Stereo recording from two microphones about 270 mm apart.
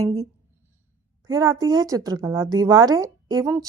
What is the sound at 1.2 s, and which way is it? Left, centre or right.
A woman's voice, centre.